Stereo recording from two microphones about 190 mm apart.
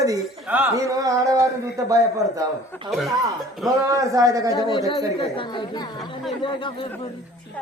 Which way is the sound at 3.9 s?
15° right (ahead or behind).